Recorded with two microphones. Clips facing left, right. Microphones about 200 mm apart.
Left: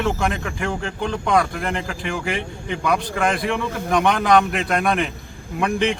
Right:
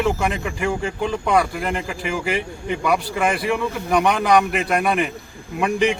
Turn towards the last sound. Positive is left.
turn(degrees=-5)  # may be behind; listen again after turning